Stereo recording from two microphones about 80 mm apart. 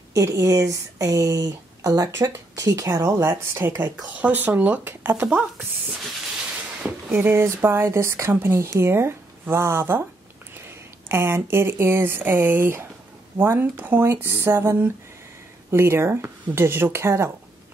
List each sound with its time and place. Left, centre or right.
0.1 s speech: right
3.9 s speech: centre
7.1 s speech: right
11.1 s speech: right